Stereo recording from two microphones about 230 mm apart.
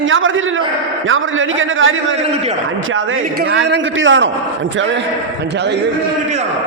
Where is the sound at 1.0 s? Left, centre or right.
Right.